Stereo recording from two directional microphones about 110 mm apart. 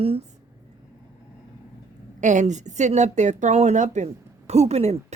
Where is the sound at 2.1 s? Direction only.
90° right.